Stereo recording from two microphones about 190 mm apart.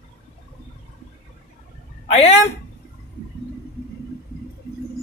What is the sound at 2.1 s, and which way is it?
Speech, 35° left (ahead or behind).